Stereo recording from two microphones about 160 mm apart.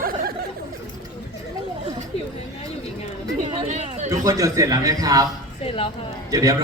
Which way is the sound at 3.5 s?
40° right (ahead or behind).